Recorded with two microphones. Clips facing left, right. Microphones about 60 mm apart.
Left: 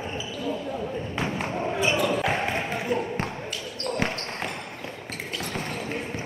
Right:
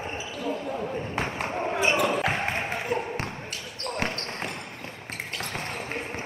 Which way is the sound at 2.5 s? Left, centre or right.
Right.